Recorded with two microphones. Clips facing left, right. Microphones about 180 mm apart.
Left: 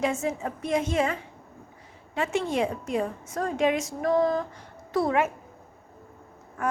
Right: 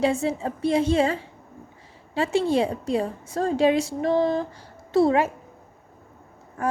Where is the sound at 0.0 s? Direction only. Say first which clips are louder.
Right 4 dB; 30° right (ahead or behind).